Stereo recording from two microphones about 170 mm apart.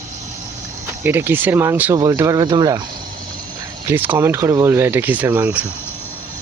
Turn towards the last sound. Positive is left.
turn(degrees=-10)  # may be behind; listen again after turning